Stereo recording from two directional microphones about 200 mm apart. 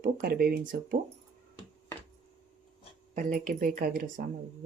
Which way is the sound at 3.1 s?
40° right (ahead or behind).